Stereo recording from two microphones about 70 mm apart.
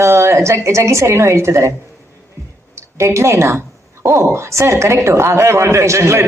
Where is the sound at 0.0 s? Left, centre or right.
Right.